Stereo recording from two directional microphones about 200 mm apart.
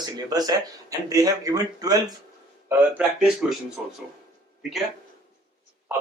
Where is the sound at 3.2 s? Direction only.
5° right (ahead or behind).